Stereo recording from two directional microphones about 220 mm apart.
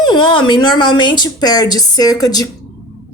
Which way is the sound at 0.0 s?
20° left (ahead or behind).